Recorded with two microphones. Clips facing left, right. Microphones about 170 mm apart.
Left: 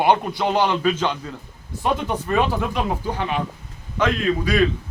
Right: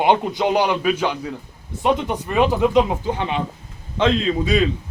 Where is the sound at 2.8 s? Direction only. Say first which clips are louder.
Right 6 dB; 25° right (ahead or behind).